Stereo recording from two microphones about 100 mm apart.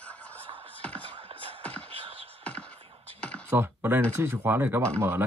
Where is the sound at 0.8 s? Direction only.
15° left (ahead or behind).